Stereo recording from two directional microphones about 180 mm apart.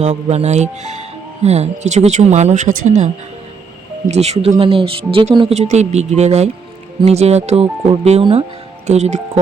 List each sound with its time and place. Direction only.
0.0 s speech: 40° right (ahead or behind)